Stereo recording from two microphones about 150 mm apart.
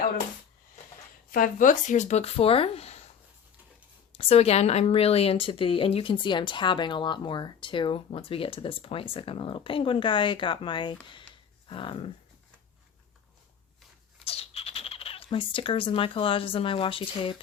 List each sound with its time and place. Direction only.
1.3 s speech: 65° left (ahead or behind); by 3.0 s 45° left (ahead or behind)
4.1 s speech: 40° left (ahead or behind)
14.3 s speech: 40° left (ahead or behind)